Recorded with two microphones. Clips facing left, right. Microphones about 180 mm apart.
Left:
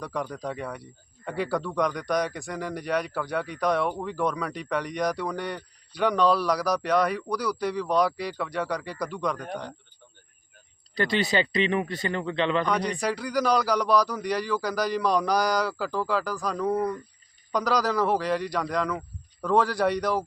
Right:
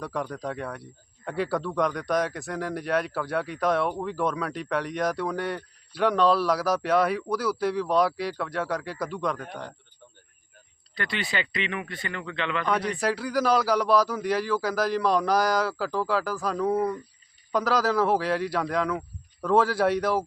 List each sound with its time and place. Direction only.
0.0 s speech: centre (ahead or behind)
10.9 s speech: 40° left (ahead or behind)
12.6 s speech: 5° right (ahead or behind)